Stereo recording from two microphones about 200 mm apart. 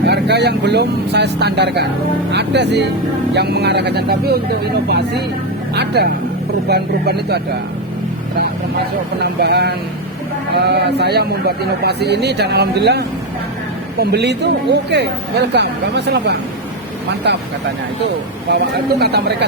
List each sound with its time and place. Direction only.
0.0 s speech: 55° right (ahead or behind)
9.2 s speech: 55° right (ahead or behind)
18.5 s speech: 55° right (ahead or behind)